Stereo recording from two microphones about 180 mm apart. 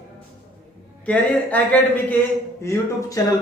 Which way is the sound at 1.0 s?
10° left (ahead or behind).